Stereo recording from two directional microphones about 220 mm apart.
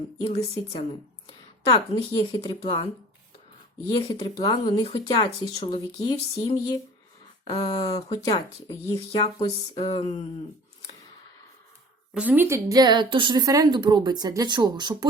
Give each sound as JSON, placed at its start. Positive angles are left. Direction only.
{"t": 0.2, "sound": "speech", "side_deg": 25}
{"t": 2.1, "sound": "speech", "side_deg": 20}
{"t": 3.9, "sound": "speech", "side_deg": 15}
{"t": 12.1, "sound": "a woman's voice", "side_deg": -5}